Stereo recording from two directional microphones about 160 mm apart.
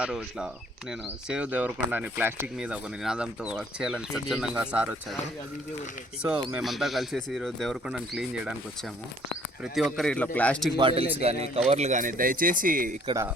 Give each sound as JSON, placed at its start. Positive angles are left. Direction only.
{"t": 0.0, "sound": "speech", "side_deg": -5}
{"t": 6.5, "sound": "speech", "side_deg": 0}
{"t": 9.7, "sound": "speech", "side_deg": 5}
{"t": 10.8, "sound": "speech", "side_deg": -35}